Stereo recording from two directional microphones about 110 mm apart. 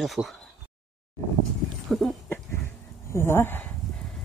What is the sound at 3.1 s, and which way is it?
Speech, 20° left (ahead or behind).